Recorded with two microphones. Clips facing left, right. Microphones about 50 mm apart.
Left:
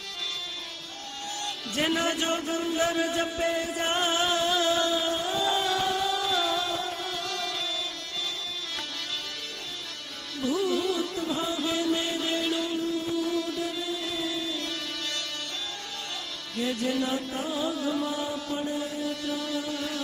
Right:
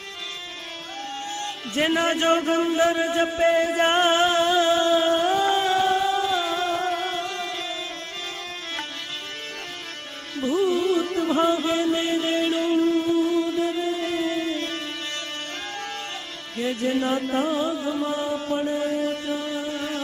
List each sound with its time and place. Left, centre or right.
1.3 s music: right
10.3 s music: right
11.5 s a sound: right
16.6 s music: right